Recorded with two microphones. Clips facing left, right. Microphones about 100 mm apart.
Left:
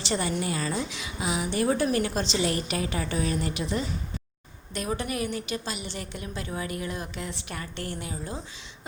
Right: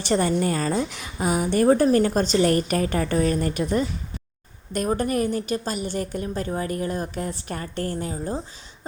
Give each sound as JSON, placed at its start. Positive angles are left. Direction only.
{"t": 0.0, "sound": "a woman's voice", "side_deg": -45}